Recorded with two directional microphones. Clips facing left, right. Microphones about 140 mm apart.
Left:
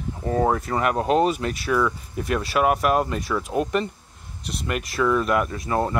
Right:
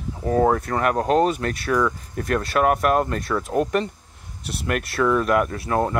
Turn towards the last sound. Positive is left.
turn(degrees=0)  # may be behind; listen again after turning